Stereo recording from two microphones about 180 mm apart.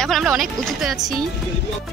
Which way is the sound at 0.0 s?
Centre (ahead or behind).